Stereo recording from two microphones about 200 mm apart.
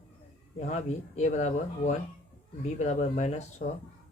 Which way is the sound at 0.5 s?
35° left (ahead or behind).